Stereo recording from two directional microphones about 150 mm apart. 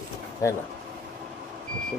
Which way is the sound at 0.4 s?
20° left (ahead or behind).